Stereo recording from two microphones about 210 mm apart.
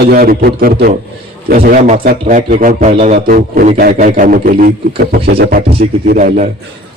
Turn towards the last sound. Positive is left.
turn(degrees=-40)  # may be behind; listen again after turning